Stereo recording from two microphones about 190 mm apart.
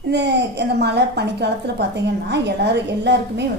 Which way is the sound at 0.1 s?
60° right (ahead or behind).